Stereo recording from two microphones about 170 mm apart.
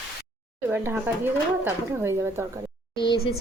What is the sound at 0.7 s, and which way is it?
Speech, 10° right (ahead or behind).